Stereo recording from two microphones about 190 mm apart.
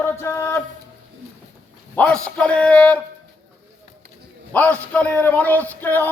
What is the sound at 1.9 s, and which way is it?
A man's voice, 5° left (ahead or behind).